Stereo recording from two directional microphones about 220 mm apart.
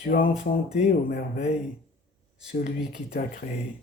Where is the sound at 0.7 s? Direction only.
45° left (ahead or behind).